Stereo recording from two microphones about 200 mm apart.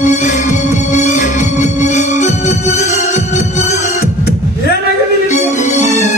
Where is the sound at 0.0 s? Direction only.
35° left (ahead or behind).